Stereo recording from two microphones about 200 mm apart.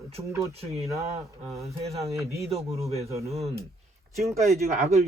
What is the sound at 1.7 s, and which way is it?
Speech, 30° right (ahead or behind).